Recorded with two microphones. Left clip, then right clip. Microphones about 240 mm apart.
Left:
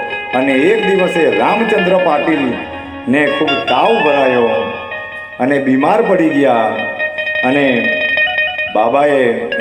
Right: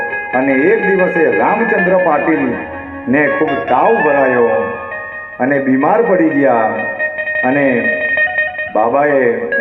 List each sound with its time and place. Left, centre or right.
0.3 s speech: left
6.1 s music: left